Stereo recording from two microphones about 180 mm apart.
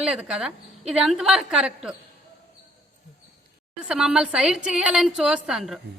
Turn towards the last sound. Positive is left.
turn(degrees=0)  # may be behind; listen again after turning